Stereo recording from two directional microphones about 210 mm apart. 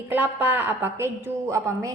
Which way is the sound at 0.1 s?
10° right (ahead or behind).